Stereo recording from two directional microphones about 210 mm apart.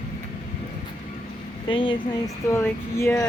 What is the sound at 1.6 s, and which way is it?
Speech, 25° left (ahead or behind).